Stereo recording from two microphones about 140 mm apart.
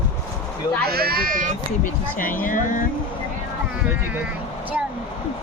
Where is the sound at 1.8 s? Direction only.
75° left (ahead or behind).